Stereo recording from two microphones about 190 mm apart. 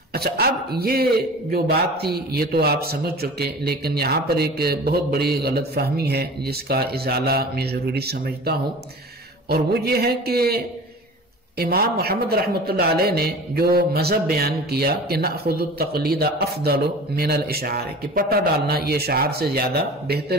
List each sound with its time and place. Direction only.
0.1 s speech: 55° right (ahead or behind)